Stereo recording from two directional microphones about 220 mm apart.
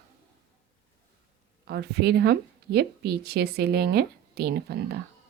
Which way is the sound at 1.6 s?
45° right (ahead or behind).